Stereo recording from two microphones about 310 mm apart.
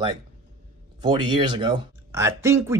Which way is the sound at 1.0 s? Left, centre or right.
Centre.